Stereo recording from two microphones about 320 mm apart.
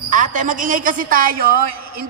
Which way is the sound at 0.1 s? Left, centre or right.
Right.